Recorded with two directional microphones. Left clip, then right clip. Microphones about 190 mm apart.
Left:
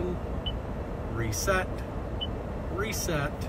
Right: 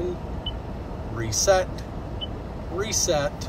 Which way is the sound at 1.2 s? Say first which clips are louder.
Right 8 dB; 15° right (ahead or behind).